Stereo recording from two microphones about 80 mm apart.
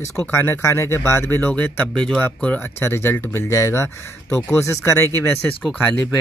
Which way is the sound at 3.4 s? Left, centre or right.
Left.